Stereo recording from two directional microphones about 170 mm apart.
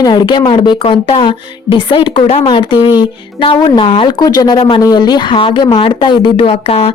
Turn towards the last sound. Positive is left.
turn(degrees=35)  # may be behind; listen again after turning